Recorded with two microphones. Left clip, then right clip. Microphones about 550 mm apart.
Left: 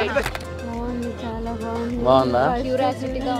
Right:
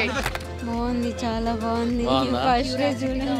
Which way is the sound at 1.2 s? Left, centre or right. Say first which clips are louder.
Right 3 dB; right.